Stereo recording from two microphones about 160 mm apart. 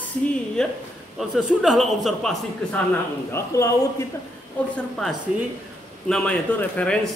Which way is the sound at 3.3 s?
20° left (ahead or behind).